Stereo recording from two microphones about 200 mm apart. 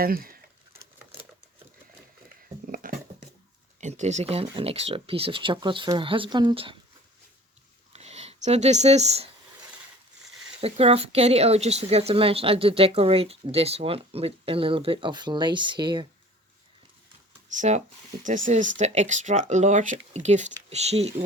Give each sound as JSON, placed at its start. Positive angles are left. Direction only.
{"t": 0.0, "sound": "speech", "side_deg": -45}
{"t": 2.7, "sound": "dog", "side_deg": -45}
{"t": 3.8, "sound": "speech", "side_deg": -35}
{"t": 7.9, "sound": "speech", "side_deg": -30}
{"t": 10.6, "sound": "speech", "side_deg": -30}
{"t": 17.5, "sound": "speech", "side_deg": -35}